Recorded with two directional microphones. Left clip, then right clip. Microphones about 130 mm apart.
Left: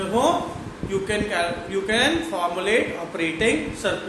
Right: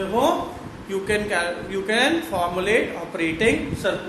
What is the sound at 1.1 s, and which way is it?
A man's voice, 40° right (ahead or behind).